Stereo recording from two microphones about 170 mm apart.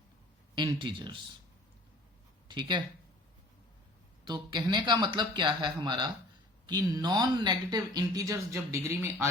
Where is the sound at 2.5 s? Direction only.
25° right (ahead or behind).